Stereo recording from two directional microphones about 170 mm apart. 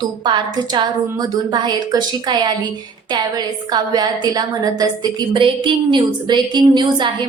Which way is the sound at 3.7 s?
25° right (ahead or behind).